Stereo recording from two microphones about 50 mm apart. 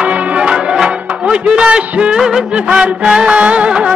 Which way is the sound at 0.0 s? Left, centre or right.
Right.